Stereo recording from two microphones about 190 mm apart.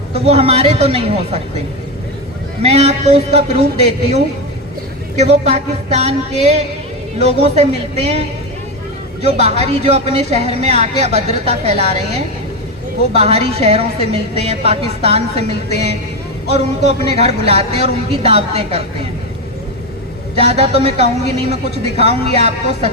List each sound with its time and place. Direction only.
0.3 s a woman's voice: 30° right (ahead or behind)
5.1 s a woman's voice: 35° right (ahead or behind)
9.2 s a woman's voice: 35° right (ahead or behind)
13.1 s a woman's voice: 30° right (ahead or behind)
20.4 s a woman's voice: 35° right (ahead or behind)